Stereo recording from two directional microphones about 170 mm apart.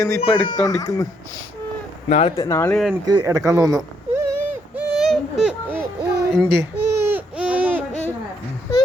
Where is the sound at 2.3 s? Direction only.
20° left (ahead or behind).